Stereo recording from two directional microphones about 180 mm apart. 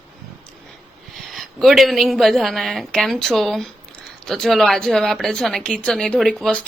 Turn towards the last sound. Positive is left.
turn(degrees=5)  # may be behind; listen again after turning